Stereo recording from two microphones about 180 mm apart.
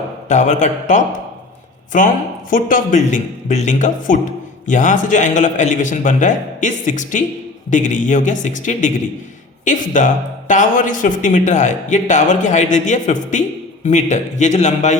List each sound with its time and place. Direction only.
0.3 s a man's voice: 40° left (ahead or behind)